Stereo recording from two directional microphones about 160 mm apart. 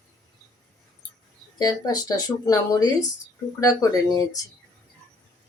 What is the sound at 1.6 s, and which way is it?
Speech, 25° left (ahead or behind).